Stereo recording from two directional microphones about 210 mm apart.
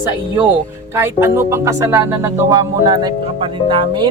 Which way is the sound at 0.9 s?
10° right (ahead or behind).